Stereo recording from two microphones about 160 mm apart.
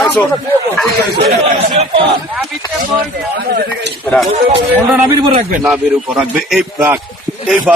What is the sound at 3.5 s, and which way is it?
Speech, 65° right (ahead or behind).